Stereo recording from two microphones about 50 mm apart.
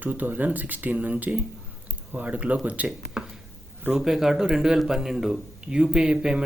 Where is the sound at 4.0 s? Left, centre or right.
Centre.